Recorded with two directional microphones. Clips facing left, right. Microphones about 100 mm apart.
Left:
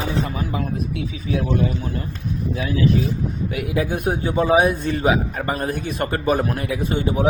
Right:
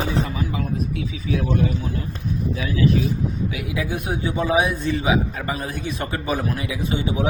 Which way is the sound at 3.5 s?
50° left (ahead or behind).